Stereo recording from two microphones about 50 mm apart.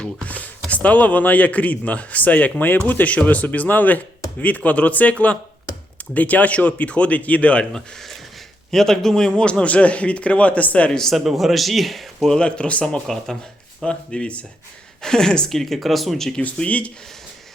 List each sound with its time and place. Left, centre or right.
0.3 s speech: left
7.6 s a woman's voice: centre
9.4 s speech: left
11.2 s a man's voice: centre
12.4 s speech: left
15.0 s a woman's voice: centre
16.6 s speech: left